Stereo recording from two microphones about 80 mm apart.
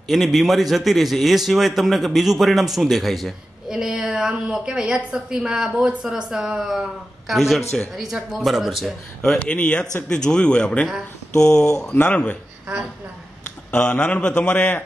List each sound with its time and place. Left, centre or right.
0.1 s a man's voice: centre
9.5 s a man's voice: centre
13.7 s a man's voice: centre